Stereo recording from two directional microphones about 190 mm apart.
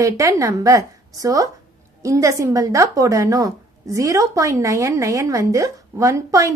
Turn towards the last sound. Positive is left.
turn(degrees=-15)  # may be behind; listen again after turning